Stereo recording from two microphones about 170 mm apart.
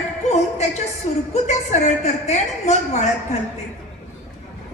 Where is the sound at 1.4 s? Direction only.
45° left (ahead or behind).